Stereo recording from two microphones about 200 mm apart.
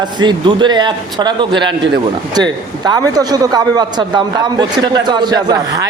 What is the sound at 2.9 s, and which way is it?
A man's voice, 20° right (ahead or behind).